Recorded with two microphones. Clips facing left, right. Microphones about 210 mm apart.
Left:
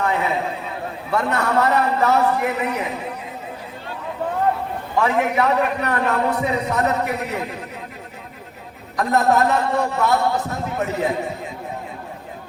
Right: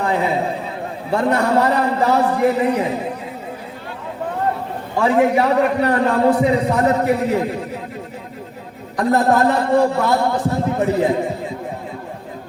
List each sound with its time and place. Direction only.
0.0 s a man's voice: 30° right (ahead or behind)
4.9 s a man's voice: 30° right (ahead or behind)
9.0 s a man's voice: 30° right (ahead or behind)